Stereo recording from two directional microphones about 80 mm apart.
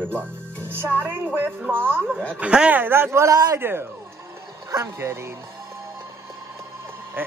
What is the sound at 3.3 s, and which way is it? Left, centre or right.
Speech, right.